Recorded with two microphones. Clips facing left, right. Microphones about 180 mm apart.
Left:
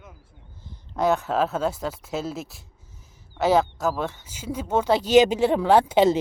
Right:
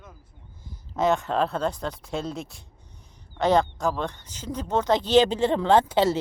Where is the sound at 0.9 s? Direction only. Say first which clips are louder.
Left 1 dB; centre (ahead or behind).